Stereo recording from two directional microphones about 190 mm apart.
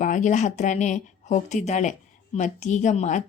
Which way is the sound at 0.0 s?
40° left (ahead or behind).